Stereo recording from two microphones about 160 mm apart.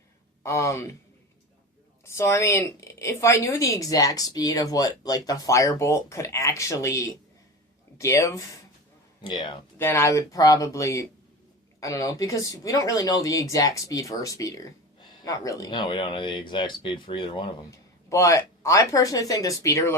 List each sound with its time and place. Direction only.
0.4 s a woman's voice: 20° left (ahead or behind)
2.0 s a woman's voice: 15° left (ahead or behind)
9.2 s a woman's voice: 30° left (ahead or behind)
9.7 s a woman's voice: 15° left (ahead or behind)